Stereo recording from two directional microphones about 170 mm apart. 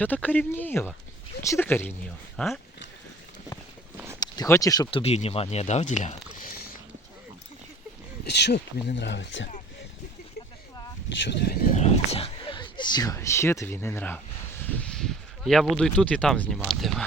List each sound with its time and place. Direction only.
0.0 s speech: 10° left (ahead or behind)
4.2 s speech: 20° left (ahead or behind); by 6.1 s 45° left (ahead or behind)
8.3 s speech: 80° left
11.2 s speech: 75° left (ahead or behind)
11.7 s speech: 40° left (ahead or behind); by 17.1 s centre (ahead or behind)